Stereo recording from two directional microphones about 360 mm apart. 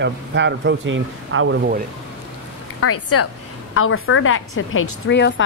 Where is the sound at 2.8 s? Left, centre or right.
Left.